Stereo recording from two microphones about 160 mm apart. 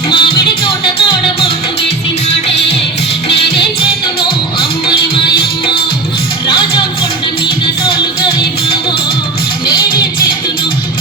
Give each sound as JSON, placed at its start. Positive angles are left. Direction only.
{"t": 0.1, "sound": "music", "side_deg": 35}
{"t": 3.2, "sound": "music", "side_deg": 35}
{"t": 5.4, "sound": "music", "side_deg": 35}